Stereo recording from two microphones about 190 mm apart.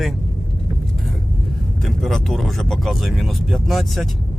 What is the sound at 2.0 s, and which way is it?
Speech, centre (ahead or behind).